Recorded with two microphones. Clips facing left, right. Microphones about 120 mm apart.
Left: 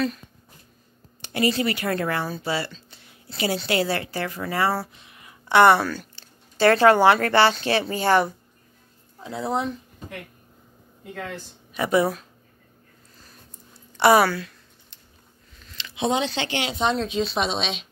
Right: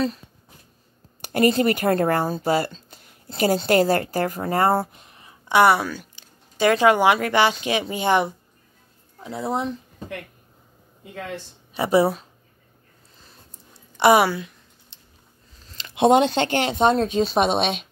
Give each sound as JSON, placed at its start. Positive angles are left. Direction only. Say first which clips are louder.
{"t": 1.2, "sound": "speech", "louder": "right 5 dB", "side_deg": -45}
{"t": 5.5, "sound": "speech", "louder": "left 1 dB", "side_deg": -10}
{"t": 9.2, "sound": "speech", "louder": "right 1 dB", "side_deg": 20}
{"t": 11.7, "sound": "speech", "louder": "right 3 dB", "side_deg": -30}
{"t": 13.9, "sound": "a sound", "louder": "right 1 dB", "side_deg": -20}
{"t": 16.0, "sound": "speech", "louder": "right 8 dB", "side_deg": -50}